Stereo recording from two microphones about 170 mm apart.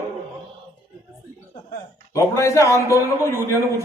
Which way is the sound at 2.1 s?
15° left (ahead or behind).